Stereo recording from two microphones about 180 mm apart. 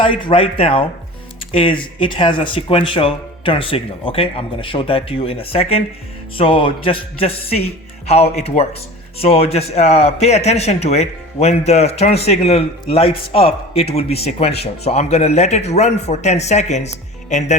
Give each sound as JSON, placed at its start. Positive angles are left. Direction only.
{"t": 0.0, "sound": "speech", "side_deg": 25}